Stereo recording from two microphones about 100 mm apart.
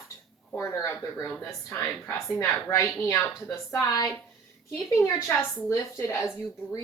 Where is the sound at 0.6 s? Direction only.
25° left (ahead or behind).